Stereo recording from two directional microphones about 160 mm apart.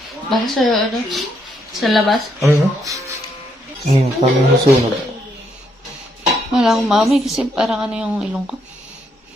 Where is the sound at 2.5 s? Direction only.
20° right (ahead or behind).